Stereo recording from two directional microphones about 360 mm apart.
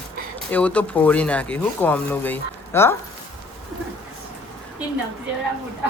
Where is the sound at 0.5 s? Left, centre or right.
Centre.